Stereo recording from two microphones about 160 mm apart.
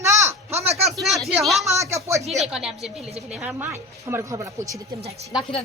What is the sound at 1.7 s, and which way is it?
Speech, 20° right (ahead or behind).